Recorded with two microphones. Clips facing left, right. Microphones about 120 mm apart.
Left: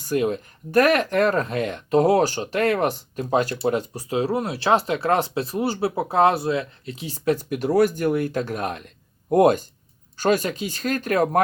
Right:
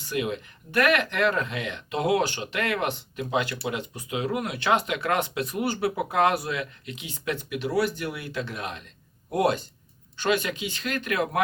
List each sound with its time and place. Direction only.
0.0 s speech: 40° left (ahead or behind)